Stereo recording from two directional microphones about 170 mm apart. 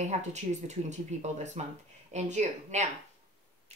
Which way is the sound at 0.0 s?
45° right (ahead or behind).